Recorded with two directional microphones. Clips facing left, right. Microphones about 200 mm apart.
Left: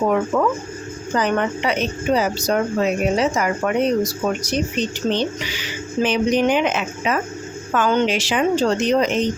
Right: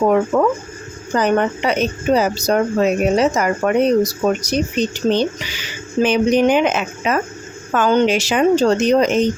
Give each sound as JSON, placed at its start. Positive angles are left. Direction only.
{"t": 0.3, "sound": "a woman's voice", "side_deg": -35}
{"t": 6.0, "sound": "a woman's voice", "side_deg": -45}